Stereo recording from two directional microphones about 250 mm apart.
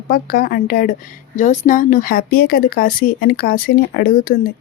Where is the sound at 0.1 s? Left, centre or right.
Left.